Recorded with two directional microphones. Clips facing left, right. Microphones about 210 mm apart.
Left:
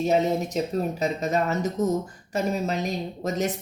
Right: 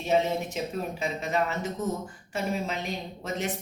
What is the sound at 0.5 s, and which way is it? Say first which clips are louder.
A woman's voice: left 6 dB; 40° left (ahead or behind).